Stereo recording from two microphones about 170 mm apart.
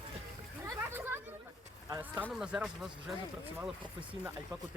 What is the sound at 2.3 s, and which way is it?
Speech, 5° right (ahead or behind).